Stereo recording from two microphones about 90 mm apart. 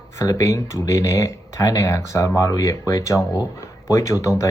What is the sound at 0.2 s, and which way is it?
Speech, 35° left (ahead or behind).